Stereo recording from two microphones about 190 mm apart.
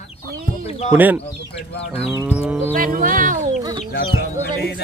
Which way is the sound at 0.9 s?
10° right (ahead or behind).